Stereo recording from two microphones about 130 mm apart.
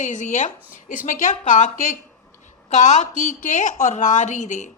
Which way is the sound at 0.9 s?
90° left.